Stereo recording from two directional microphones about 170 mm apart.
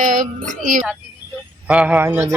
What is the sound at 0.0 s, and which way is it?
Speech, 50° right (ahead or behind).